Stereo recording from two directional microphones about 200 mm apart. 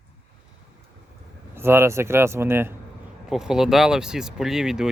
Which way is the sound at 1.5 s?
10° right (ahead or behind).